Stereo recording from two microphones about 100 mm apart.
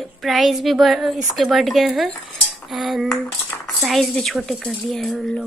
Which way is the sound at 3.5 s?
20° left (ahead or behind).